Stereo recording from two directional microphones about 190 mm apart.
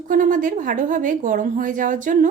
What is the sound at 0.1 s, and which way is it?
Speech, 45° right (ahead or behind).